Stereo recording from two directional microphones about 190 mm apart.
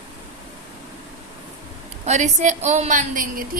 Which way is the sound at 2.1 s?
40° right (ahead or behind).